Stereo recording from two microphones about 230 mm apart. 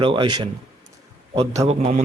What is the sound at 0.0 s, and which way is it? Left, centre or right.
A man's voice, right.